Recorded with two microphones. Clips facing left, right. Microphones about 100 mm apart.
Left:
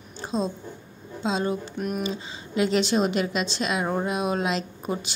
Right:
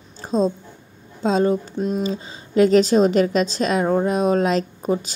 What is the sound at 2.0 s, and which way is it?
A woman's voice, 40° right (ahead or behind).